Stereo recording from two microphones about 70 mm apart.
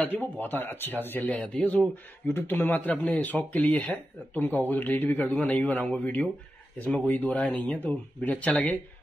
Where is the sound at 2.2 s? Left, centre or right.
Left.